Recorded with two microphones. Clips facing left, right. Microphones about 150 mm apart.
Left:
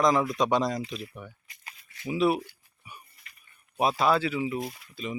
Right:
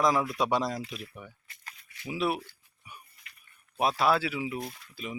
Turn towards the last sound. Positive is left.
turn(degrees=5)  # may be behind; listen again after turning